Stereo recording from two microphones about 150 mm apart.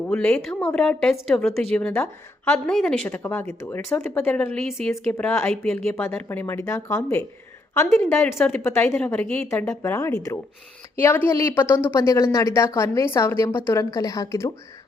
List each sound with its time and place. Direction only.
0.1 s a woman's voice: 5° left (ahead or behind)
5.1 s a woman's voice: 15° left (ahead or behind)
5.4 s a woman's voice: 5° left (ahead or behind)
9.2 s speech: 5° left (ahead or behind)
9.5 s a woman's voice: 15° left (ahead or behind)